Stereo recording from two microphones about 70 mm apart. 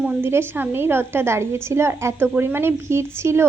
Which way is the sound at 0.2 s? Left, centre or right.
Right.